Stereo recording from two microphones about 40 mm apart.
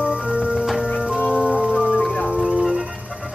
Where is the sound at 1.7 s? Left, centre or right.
Centre.